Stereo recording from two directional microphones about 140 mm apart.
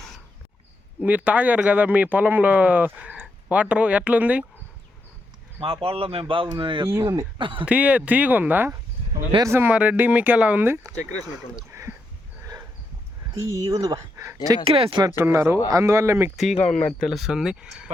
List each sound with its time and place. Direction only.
1.0 s speech: 10° right (ahead or behind)
5.5 s speech: 45° right (ahead or behind)
7.0 s speech: 25° right (ahead or behind)
7.3 s speech: 35° right (ahead or behind)
7.6 s speech: 10° right (ahead or behind)
11.7 s a sound: 20° right (ahead or behind)
13.7 s speech: 25° right (ahead or behind)
14.6 s speech: 40° right (ahead or behind)
15.0 s speech: 20° right (ahead or behind)
16.3 s speech: centre (ahead or behind)
16.6 s speech: 55° left (ahead or behind)
17.0 s speech: centre (ahead or behind)